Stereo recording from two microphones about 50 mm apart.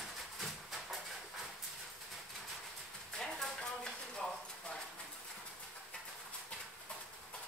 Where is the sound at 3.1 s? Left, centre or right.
Centre.